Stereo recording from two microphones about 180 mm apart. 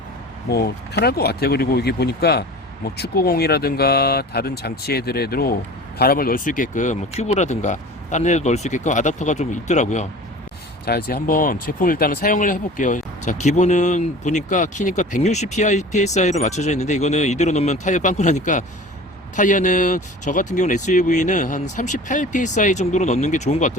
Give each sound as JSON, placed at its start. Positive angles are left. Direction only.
{"t": 0.5, "sound": "speech", "side_deg": 60}
{"t": 10.8, "sound": "speech", "side_deg": 60}